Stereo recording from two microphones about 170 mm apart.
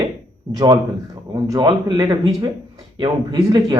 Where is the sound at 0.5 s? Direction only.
20° right (ahead or behind).